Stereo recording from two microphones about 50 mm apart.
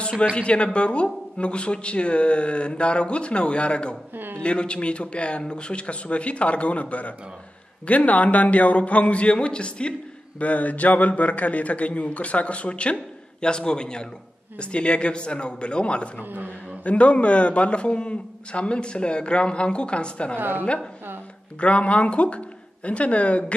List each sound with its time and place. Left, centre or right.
0.0 s a man's voice: left
4.1 s speech: right
4.4 s a man's voice: left
16.3 s speech: right
16.8 s a man's voice: left
20.3 s speech: right
21.5 s a man's voice: left